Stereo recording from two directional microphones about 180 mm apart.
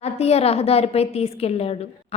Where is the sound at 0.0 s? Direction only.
35° left (ahead or behind).